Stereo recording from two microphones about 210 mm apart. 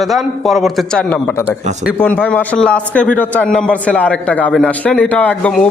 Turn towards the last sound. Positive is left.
turn(degrees=5)  # may be behind; listen again after turning